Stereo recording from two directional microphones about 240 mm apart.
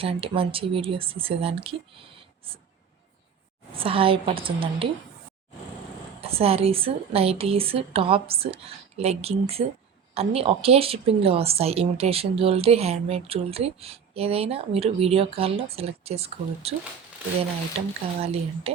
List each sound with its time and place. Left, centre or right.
0.0 s a woman's voice: right
2.1 s a sound: right
3.8 s a woman's voice: right
6.2 s a woman's voice: right
17.7 s a woman's voice: right